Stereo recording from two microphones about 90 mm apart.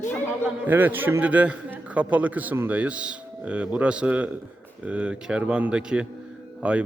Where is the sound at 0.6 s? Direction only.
20° right (ahead or behind).